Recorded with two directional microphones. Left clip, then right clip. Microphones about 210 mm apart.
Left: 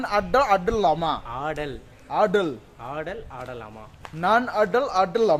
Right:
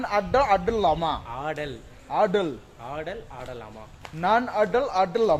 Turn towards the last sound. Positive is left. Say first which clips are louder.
# left 1 dB
turn(degrees=15)  # may be behind; listen again after turning